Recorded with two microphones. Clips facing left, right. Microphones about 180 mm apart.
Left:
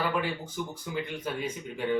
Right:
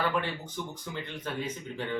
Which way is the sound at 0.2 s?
10° left (ahead or behind).